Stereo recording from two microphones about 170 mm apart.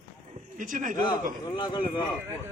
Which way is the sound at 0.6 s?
50° right (ahead or behind).